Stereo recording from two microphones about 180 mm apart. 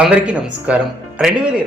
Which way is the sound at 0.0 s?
5° right (ahead or behind).